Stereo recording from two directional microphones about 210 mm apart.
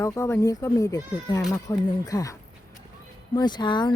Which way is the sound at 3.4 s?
20° left (ahead or behind).